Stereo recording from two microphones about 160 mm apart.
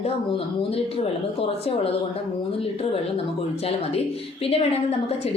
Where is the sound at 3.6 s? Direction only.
40° left (ahead or behind).